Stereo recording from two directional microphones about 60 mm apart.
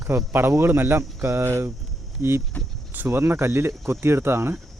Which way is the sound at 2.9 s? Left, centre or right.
Right.